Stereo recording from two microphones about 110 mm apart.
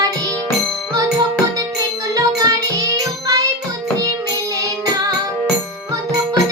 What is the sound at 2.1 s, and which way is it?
Music, 30° right (ahead or behind).